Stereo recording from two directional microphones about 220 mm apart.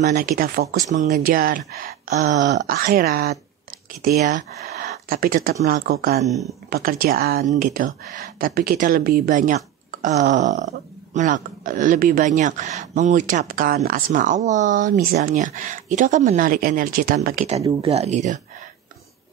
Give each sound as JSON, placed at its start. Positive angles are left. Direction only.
{"t": 0.0, "sound": "speech", "side_deg": -40}
{"t": 6.2, "sound": "speech", "side_deg": 0}
{"t": 6.7, "sound": "speech", "side_deg": -40}
{"t": 17.6, "sound": "speech", "side_deg": -25}